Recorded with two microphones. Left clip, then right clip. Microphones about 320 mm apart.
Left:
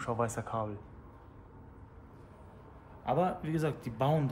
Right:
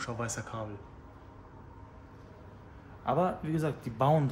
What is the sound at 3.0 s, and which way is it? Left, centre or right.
Speech, centre.